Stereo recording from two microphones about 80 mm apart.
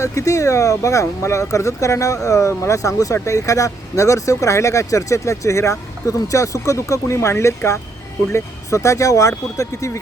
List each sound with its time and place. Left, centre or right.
0.0 s speech: left